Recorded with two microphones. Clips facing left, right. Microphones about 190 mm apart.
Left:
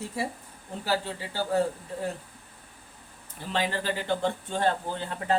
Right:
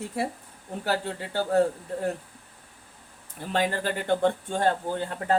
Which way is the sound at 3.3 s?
50° right (ahead or behind).